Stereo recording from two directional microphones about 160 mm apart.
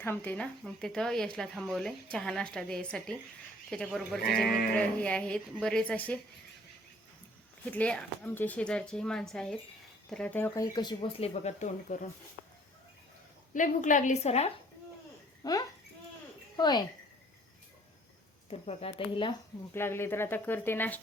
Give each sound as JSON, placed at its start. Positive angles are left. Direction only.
{"t": 0.0, "sound": "speech", "side_deg": 15}
{"t": 4.2, "sound": "speech", "side_deg": 70}
{"t": 4.7, "sound": "speech", "side_deg": 10}
{"t": 7.7, "sound": "speech", "side_deg": 10}
{"t": 10.5, "sound": "speech", "side_deg": 25}
{"t": 11.2, "sound": "a woman's voice", "side_deg": 45}
{"t": 13.5, "sound": "a woman's voice", "side_deg": 55}
{"t": 15.4, "sound": "speech", "side_deg": 25}
{"t": 18.6, "sound": "speech", "side_deg": 40}
{"t": 19.7, "sound": "speech", "side_deg": 15}